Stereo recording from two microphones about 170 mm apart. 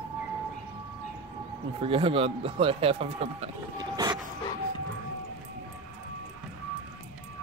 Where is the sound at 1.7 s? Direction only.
30° right (ahead or behind).